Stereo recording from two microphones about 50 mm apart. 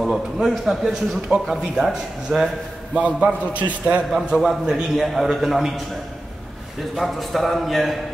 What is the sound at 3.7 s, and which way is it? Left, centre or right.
Speech, right.